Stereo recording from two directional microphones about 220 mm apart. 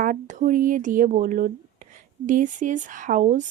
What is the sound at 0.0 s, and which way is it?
Speech, 35° right (ahead or behind).